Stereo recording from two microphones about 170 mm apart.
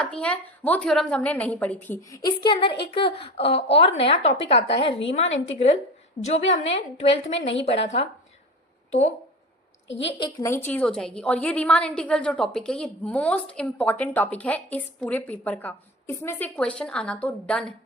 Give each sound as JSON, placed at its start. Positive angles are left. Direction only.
{"t": 0.0, "sound": "a woman's voice", "side_deg": 5}
{"t": 2.1, "sound": "a woman's voice", "side_deg": 25}
{"t": 10.4, "sound": "a woman's voice", "side_deg": 15}